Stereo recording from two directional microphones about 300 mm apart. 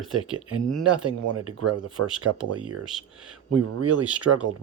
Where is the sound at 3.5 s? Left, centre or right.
Right.